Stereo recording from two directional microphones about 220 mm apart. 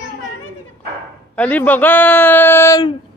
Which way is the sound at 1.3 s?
5° left (ahead or behind).